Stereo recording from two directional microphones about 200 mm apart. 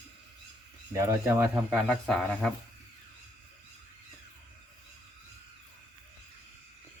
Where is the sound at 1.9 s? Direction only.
Centre (ahead or behind).